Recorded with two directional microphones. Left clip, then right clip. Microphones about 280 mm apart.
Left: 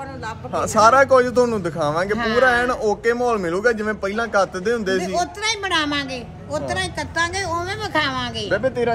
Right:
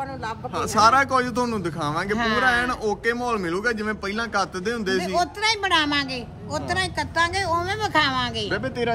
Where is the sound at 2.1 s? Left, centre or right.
Centre.